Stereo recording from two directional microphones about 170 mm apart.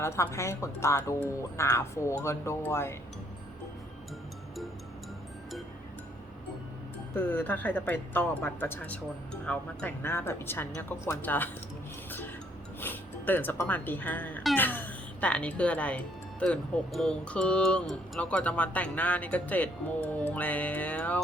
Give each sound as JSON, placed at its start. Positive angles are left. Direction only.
{"t": 0.0, "sound": "speech", "side_deg": 15}
{"t": 7.1, "sound": "speech", "side_deg": 10}
{"t": 12.8, "sound": "speech", "side_deg": 10}